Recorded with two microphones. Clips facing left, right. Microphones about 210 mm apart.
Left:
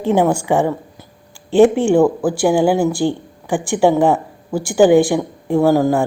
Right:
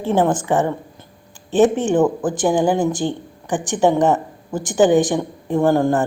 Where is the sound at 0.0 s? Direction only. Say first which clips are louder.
Left 2 dB; 15° left (ahead or behind).